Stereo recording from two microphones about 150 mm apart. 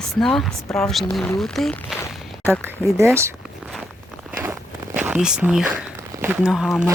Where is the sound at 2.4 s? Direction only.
15° right (ahead or behind).